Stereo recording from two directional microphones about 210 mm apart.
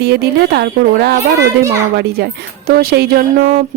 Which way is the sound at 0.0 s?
50° right (ahead or behind).